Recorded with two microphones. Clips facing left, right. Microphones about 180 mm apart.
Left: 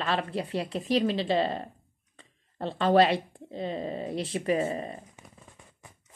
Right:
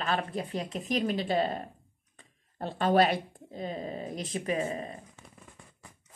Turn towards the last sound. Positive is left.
turn(degrees=30)  # may be behind; listen again after turning